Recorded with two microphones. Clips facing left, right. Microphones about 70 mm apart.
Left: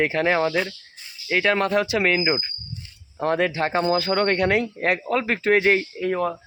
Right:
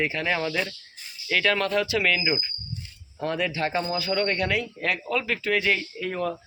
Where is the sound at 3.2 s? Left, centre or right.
Left.